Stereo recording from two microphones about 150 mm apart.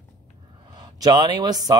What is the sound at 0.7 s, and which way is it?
Speech, 30° right (ahead or behind).